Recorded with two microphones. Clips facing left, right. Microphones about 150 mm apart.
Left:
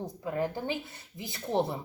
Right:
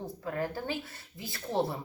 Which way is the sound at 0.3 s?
20° left (ahead or behind).